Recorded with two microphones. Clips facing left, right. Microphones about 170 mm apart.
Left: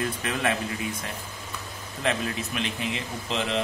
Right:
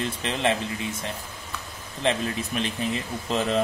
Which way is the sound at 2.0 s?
30° right (ahead or behind).